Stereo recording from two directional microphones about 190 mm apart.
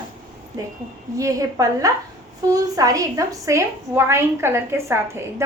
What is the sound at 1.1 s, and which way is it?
A woman's voice, 15° right (ahead or behind).